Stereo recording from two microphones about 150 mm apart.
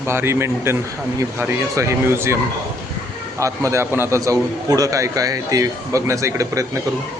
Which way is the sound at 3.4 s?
20° right (ahead or behind).